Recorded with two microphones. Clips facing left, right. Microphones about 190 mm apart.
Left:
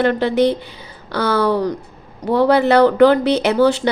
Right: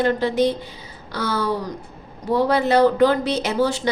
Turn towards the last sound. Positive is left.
turn(degrees=65)  # may be behind; listen again after turning